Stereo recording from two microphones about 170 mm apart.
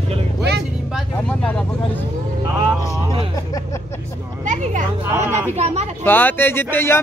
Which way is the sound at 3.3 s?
20° left (ahead or behind).